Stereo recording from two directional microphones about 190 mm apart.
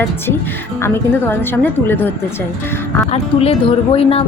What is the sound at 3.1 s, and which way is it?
Speech, 30° left (ahead or behind).